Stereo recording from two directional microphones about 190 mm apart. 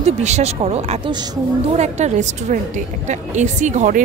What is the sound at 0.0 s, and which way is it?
A woman's voice, 35° right (ahead or behind).